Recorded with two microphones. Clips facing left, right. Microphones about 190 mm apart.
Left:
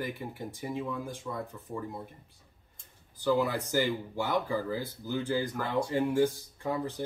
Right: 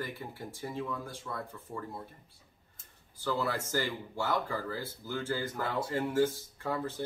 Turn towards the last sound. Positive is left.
turn(degrees=15)  # may be behind; listen again after turning